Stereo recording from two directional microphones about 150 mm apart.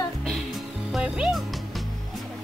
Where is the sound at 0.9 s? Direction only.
5° right (ahead or behind).